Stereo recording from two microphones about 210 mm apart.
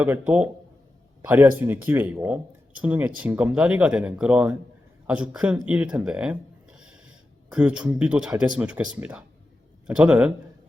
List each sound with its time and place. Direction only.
0.0 s speech: 10° right (ahead or behind)